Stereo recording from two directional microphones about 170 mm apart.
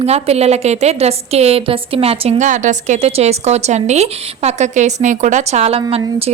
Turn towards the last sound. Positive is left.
turn(degrees=-35)  # may be behind; listen again after turning